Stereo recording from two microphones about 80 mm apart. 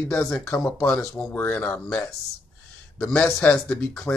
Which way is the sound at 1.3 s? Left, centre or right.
Left.